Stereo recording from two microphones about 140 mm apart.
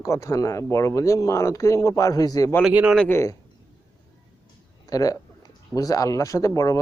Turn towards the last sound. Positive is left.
turn(degrees=25)  # may be behind; listen again after turning